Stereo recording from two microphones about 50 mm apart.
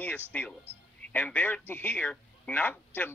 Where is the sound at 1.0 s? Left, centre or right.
Left.